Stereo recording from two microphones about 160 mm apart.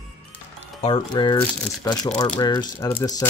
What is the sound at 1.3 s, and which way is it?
Speech, 20° left (ahead or behind).